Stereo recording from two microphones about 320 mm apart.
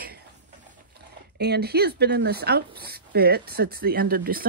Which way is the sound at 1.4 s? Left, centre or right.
Right.